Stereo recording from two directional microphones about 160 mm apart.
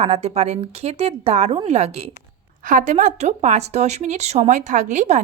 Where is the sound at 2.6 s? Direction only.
55° right (ahead or behind).